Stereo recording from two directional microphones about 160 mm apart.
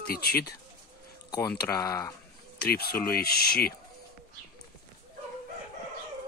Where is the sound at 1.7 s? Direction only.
20° left (ahead or behind).